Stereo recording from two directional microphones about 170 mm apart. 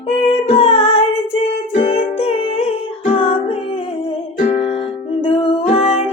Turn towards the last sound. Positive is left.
turn(degrees=35)  # may be behind; listen again after turning